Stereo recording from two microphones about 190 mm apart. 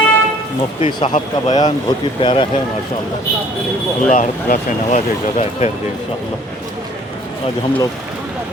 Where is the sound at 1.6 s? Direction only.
25° left (ahead or behind).